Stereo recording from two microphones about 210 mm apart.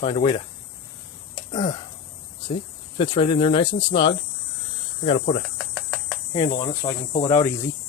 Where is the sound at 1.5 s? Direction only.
30° left (ahead or behind).